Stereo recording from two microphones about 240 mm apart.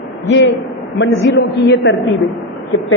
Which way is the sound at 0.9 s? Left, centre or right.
Left.